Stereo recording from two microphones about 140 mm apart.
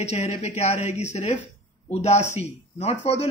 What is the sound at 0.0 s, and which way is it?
Speech, 50° left (ahead or behind).